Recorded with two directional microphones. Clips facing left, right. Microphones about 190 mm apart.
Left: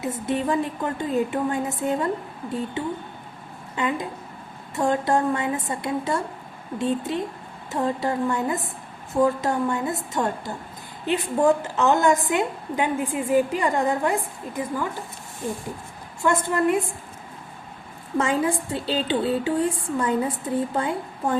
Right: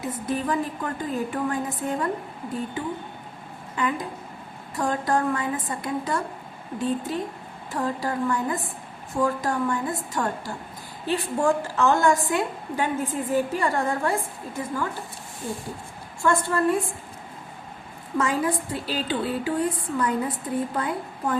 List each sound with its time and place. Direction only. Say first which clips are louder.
0.0 s a woman's voice: left 2 dB; 25° left (ahead or behind)
3.8 s a woman's voice: left 1 dB; 25° left (ahead or behind)
16.2 s a woman's voice: left 1 dB; 20° left (ahead or behind)
18.2 s a woman's voice: left 2 dB; 25° left (ahead or behind)